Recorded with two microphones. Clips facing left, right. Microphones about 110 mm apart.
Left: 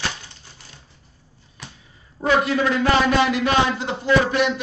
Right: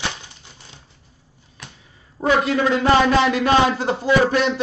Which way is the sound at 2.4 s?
25° right (ahead or behind).